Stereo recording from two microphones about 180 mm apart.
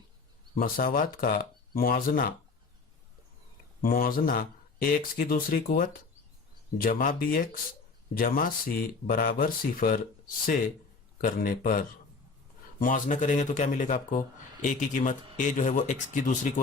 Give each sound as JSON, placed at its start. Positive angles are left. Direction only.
{"t": 0.6, "sound": "speech", "side_deg": 50}
{"t": 3.8, "sound": "speech", "side_deg": 50}
{"t": 11.2, "sound": "speech", "side_deg": 50}